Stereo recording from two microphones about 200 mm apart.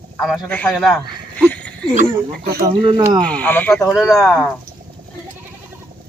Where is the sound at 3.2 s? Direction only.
5° left (ahead or behind).